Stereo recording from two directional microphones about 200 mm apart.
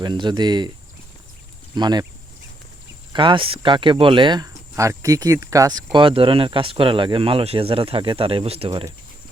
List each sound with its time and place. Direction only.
0.0 s speech: 20° right (ahead or behind)
1.7 s speech: 20° right (ahead or behind)
3.1 s speech: 25° right (ahead or behind)